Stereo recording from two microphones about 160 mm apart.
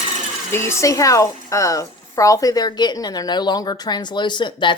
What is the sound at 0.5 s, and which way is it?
Speech, 15° left (ahead or behind).